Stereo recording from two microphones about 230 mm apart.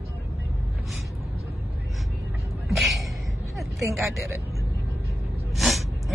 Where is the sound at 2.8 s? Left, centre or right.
Centre.